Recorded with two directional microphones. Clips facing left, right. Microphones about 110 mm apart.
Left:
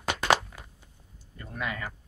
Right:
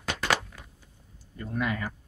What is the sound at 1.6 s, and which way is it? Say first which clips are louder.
Speech: right 3 dB; centre (ahead or behind).